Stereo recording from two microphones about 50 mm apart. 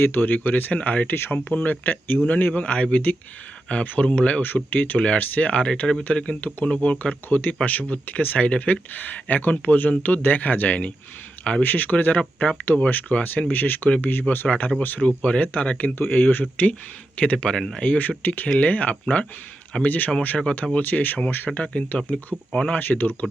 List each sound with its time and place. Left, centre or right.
0.0 s speech: left
1.1 s speech: left
4.9 s speech: left
6.4 s speech: left
14.4 s speech: left
14.8 s speech: left
15.0 s speech: left
17.3 s speech: centre
17.8 s speech: left
21.5 s speech: left
22.7 s speech: left